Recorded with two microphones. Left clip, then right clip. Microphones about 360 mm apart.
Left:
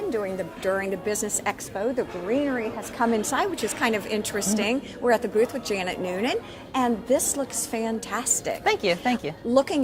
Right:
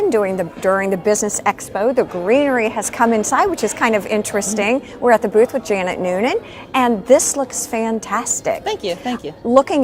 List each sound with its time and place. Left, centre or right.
0.1 s a woman's voice: right
8.6 s speech: left
9.5 s a woman's voice: right